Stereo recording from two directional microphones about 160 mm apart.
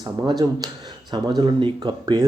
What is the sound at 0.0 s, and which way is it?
Speech, 25° right (ahead or behind).